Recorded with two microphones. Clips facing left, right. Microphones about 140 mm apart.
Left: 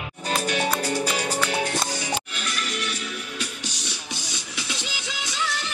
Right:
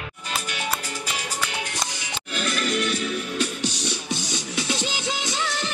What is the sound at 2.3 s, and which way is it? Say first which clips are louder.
Music: right 6 dB; 40° right (ahead or behind).